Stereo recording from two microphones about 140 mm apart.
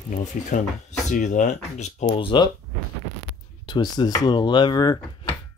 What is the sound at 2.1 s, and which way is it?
Speech, 35° left (ahead or behind).